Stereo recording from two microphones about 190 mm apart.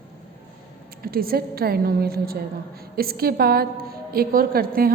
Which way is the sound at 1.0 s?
50° right (ahead or behind).